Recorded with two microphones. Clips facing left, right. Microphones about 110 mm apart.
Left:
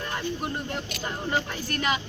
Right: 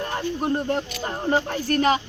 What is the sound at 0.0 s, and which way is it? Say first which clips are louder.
Speech: right 5 dB; 35° right (ahead or behind).